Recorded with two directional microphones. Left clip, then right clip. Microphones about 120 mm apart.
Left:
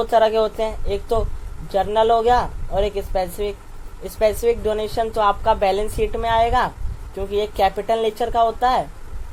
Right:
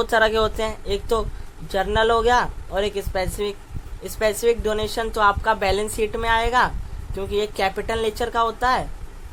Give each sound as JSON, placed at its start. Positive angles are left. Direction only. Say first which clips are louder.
{"t": 0.0, "sound": "a woman's voice", "louder": "left 2 dB", "side_deg": -40}